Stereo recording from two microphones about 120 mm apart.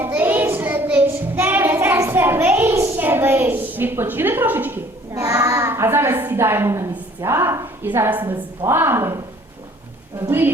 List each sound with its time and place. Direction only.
0.0 s child singing: 15° right (ahead or behind)
5.1 s a woman's voice: 30° right (ahead or behind)